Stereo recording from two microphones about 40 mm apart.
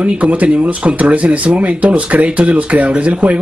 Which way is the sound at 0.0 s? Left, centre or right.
Right.